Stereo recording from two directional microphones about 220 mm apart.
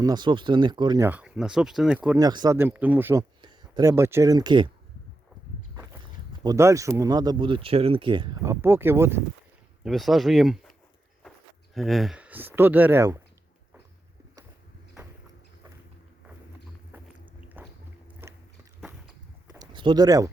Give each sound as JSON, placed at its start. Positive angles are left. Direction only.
{"t": 0.0, "sound": "speech", "side_deg": -20}
{"t": 6.4, "sound": "speech", "side_deg": -15}
{"t": 17.6, "sound": "boat", "side_deg": -10}
{"t": 18.2, "sound": "walk", "side_deg": -10}
{"t": 19.5, "sound": "a sound", "side_deg": -20}